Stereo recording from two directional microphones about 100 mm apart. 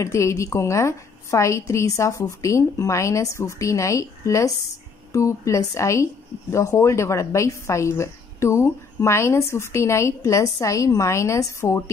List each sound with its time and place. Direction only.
0.0 s a woman's voice: 30° left (ahead or behind)